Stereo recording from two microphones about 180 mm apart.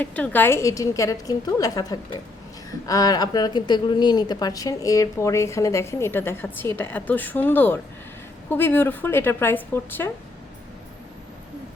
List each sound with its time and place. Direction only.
0.0 s speech: 10° left (ahead or behind)